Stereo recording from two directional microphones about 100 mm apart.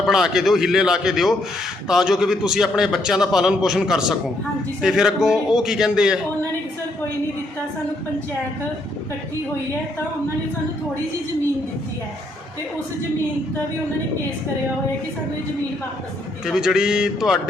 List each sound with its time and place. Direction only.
0.0 s a man's voice: 5° right (ahead or behind)
16.5 s speech: 5° right (ahead or behind)